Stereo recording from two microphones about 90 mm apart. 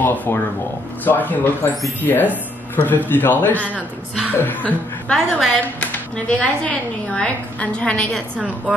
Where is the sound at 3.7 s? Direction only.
15° right (ahead or behind).